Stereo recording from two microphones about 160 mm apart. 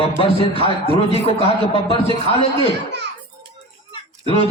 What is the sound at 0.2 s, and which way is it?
Speech, 35° left (ahead or behind).